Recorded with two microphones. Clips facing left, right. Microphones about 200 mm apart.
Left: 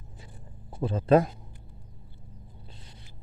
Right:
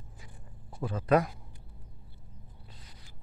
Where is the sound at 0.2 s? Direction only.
25° left (ahead or behind).